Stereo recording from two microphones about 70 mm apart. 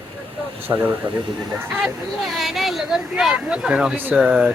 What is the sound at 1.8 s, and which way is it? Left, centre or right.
Speech, centre.